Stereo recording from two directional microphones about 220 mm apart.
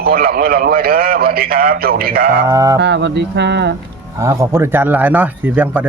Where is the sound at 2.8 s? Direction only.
50° right (ahead or behind).